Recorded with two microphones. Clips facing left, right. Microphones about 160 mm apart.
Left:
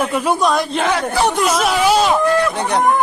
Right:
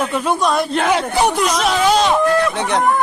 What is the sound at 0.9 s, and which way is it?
Speech, 15° right (ahead or behind).